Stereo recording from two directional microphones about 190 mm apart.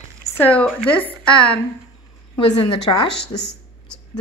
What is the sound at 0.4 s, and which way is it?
Speech, 10° left (ahead or behind).